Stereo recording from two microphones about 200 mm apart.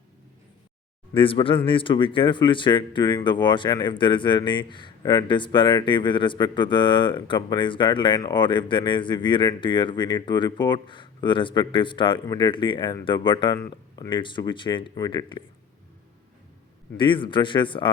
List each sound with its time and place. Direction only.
1.1 s speech: 25° left (ahead or behind)
17.0 s speech: 25° left (ahead or behind)